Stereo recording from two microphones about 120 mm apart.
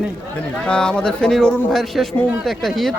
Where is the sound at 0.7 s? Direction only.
5° left (ahead or behind).